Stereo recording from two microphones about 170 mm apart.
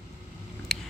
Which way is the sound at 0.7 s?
Centre (ahead or behind).